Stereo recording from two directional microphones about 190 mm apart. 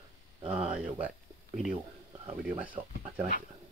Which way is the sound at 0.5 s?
5° right (ahead or behind).